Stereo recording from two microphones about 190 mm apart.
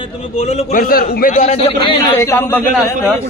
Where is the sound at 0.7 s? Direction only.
50° left (ahead or behind); by 2.2 s 25° left (ahead or behind).